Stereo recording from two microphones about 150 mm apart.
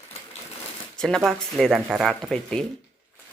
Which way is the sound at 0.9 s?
5° left (ahead or behind).